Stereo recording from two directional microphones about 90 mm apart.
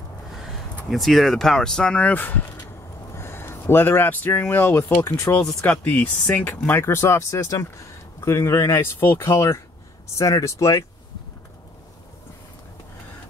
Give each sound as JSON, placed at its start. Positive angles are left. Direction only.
{"t": 0.4, "sound": "speech", "side_deg": 0}
{"t": 5.7, "sound": "speech", "side_deg": 20}